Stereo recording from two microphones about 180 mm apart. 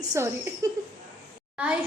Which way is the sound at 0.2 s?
15° right (ahead or behind).